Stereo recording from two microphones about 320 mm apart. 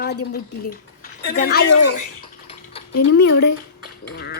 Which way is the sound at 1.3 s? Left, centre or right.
Left.